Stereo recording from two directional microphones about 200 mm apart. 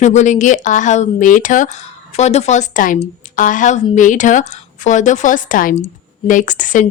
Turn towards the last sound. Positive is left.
turn(degrees=40)  # may be behind; listen again after turning